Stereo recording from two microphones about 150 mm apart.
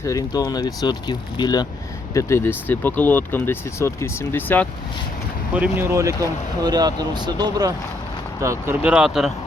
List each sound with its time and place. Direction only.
0.0 s speech: 25° left (ahead or behind)
2.1 s speech: 15° left (ahead or behind)
5.5 s speech: 10° right (ahead or behind); by 7.7 s 25° right (ahead or behind)
8.4 s speech: 15° right (ahead or behind)